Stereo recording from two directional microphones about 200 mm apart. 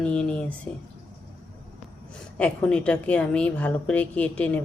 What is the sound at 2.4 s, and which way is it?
A woman's voice, 5° left (ahead or behind).